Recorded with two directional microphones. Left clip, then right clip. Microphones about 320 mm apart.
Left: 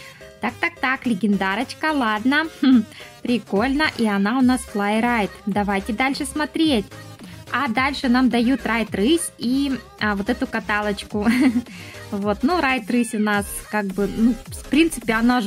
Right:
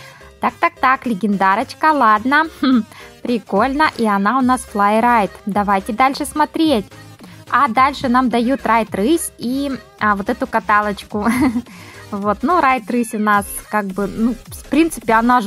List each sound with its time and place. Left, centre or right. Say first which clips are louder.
0.4 s a woman's voice: right 7 dB; centre